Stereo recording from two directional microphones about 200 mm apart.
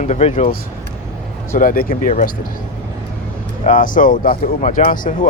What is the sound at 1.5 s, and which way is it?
Speech, 45° left (ahead or behind).